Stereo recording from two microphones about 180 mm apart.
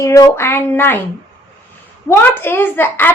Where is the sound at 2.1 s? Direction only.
10° left (ahead or behind).